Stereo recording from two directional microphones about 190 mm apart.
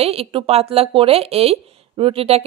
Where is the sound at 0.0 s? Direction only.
30° right (ahead or behind).